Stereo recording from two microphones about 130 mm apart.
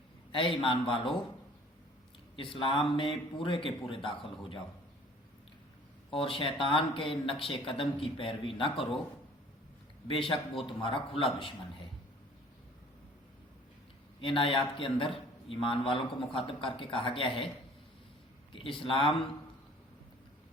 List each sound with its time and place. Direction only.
0.3 s a man's voice: 40° left (ahead or behind)
2.3 s a man's voice: 40° left (ahead or behind)
6.1 s a man's voice: 45° left (ahead or behind)
10.1 s a man's voice: 40° left (ahead or behind)
14.2 s a man's voice: 45° left (ahead or behind)
18.5 s a man's voice: 45° left (ahead or behind)